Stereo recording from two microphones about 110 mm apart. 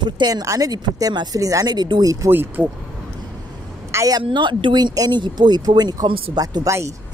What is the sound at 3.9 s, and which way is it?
Speech, 30° right (ahead or behind).